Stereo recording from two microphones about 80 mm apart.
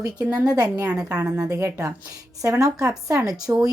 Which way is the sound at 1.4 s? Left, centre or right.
Right.